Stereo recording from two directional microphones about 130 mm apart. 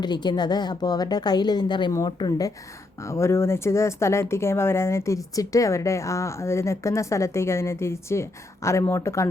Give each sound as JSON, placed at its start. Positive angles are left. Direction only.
{"t": 0.0, "sound": "a woman's voice", "side_deg": 35}
{"t": 1.9, "sound": "a woman's voice", "side_deg": 25}